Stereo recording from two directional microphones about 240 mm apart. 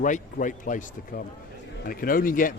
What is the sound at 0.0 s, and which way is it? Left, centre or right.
A man's voice, left.